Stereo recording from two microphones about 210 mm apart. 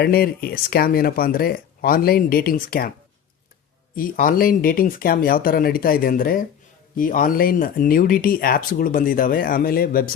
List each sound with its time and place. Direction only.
0.0 s speech: 45° left (ahead or behind)
3.9 s speech: 40° left (ahead or behind)